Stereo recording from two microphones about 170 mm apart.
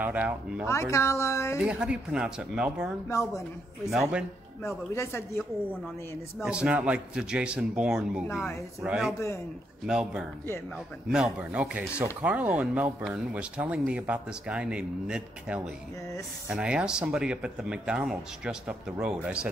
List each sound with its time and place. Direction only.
0.0 s speech: 10° right (ahead or behind)
0.7 s a woman's voice: 15° left (ahead or behind)
1.6 s speech: 5° right (ahead or behind)
3.1 s speech: 20° left (ahead or behind)
4.6 s a woman's voice: 15° left (ahead or behind)
6.4 s speech: 5° right (ahead or behind)